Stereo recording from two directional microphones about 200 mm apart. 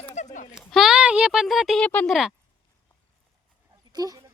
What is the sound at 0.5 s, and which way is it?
Speech, centre (ahead or behind).